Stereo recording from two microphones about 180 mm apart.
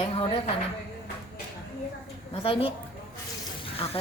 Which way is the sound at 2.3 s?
30° left (ahead or behind).